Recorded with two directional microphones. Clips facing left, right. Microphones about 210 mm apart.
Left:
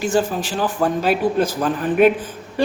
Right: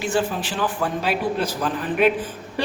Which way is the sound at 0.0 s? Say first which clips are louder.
Left 4 dB; 45° left (ahead or behind).